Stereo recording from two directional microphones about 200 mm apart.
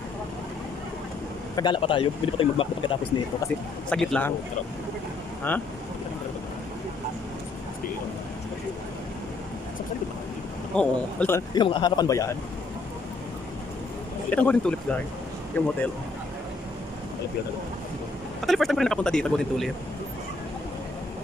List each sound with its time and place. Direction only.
1.6 s speech: 25° left (ahead or behind)
3.9 s a man's voice: 5° left (ahead or behind)
5.5 s speech: 10° left (ahead or behind)
10.7 s speech: 5° left (ahead or behind)
11.5 s speech: 25° left (ahead or behind)
14.3 s a man's voice: 5° left (ahead or behind)
18.4 s a man's voice: centre (ahead or behind)